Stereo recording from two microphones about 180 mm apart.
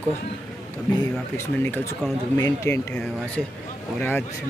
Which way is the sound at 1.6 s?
10° left (ahead or behind).